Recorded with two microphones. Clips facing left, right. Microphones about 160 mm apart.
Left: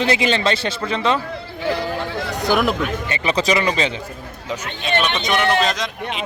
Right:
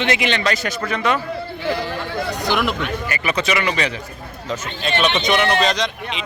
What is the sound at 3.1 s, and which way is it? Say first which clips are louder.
Speech: left 3 dB; 30° left (ahead or behind).